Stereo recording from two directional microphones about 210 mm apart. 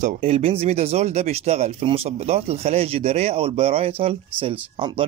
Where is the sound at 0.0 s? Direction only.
30° right (ahead or behind).